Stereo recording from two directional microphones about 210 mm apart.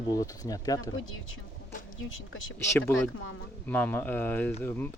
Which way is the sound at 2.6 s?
10° left (ahead or behind).